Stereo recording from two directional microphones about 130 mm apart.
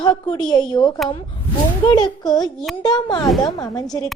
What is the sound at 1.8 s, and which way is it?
Speech, 35° left (ahead or behind).